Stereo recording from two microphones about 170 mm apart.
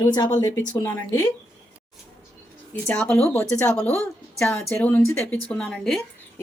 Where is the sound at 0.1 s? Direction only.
20° left (ahead or behind).